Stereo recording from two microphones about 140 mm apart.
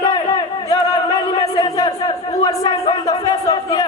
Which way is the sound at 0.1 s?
30° left (ahead or behind).